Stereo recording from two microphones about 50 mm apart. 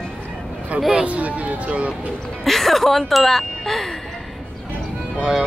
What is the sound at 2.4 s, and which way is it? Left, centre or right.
Music, centre.